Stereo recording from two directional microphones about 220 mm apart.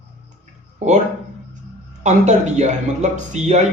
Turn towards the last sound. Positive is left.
turn(degrees=-30)  # may be behind; listen again after turning